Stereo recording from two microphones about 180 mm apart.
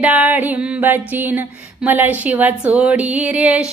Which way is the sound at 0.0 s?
5° right (ahead or behind).